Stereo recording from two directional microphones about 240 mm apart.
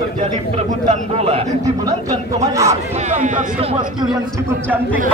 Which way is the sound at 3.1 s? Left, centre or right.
Right.